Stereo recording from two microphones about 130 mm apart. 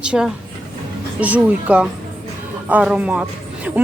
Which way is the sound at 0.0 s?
10° right (ahead or behind).